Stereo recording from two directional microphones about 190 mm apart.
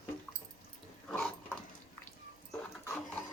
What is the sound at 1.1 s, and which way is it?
Dog, centre (ahead or behind).